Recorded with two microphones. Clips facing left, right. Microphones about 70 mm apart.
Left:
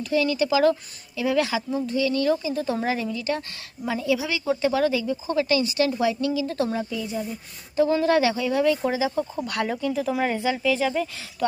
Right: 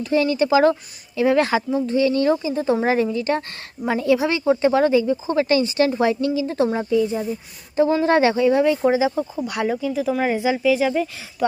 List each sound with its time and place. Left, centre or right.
0.0 s speech: right
3.8 s speech: right
9.1 s speech: centre
10.2 s speech: centre